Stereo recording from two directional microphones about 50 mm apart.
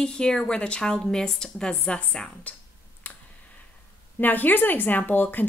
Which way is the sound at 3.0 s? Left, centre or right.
Left.